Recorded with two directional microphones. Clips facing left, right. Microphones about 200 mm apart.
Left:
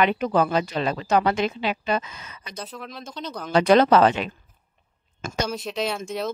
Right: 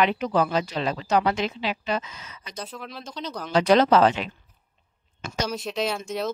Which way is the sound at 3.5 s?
55° left (ahead or behind).